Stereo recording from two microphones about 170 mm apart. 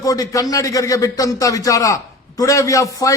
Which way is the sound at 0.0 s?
20° left (ahead or behind).